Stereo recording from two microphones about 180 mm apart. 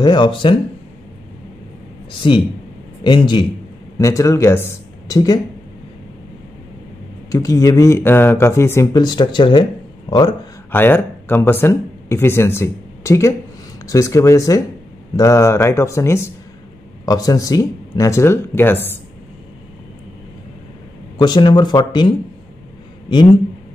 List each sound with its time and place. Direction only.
0.0 s speech: 25° left (ahead or behind)
2.2 s speech: 25° left (ahead or behind)
7.2 s speech: 20° left (ahead or behind)
10.7 s speech: 10° left (ahead or behind)
21.2 s speech: 25° left (ahead or behind)